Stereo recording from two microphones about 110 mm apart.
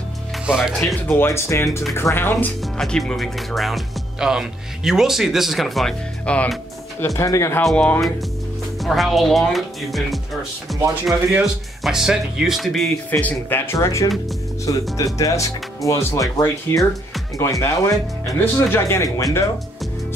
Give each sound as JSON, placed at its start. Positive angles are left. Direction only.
{"t": 0.5, "sound": "speech", "side_deg": -5}
{"t": 1.0, "sound": "speech", "side_deg": 25}
{"t": 2.6, "sound": "speech", "side_deg": 0}
{"t": 6.2, "sound": "speech", "side_deg": 10}
{"t": 7.2, "sound": "speech", "side_deg": 30}
{"t": 7.6, "sound": "speech", "side_deg": 10}
{"t": 8.7, "sound": "speech", "side_deg": 0}
{"t": 11.1, "sound": "speech", "side_deg": -10}
{"t": 13.1, "sound": "speech", "side_deg": 15}